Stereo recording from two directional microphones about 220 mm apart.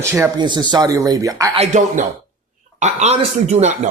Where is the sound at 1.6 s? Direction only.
35° right (ahead or behind).